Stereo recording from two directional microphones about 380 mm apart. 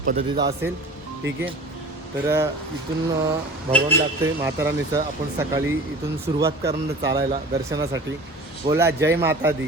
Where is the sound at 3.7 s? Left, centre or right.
Centre.